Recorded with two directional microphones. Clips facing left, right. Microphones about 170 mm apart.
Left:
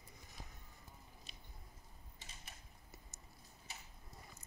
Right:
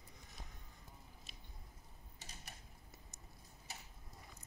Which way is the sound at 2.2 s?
40° right (ahead or behind).